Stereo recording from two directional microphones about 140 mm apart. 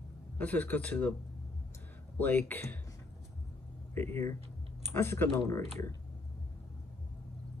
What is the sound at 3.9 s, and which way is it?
A man's voice, 20° left (ahead or behind).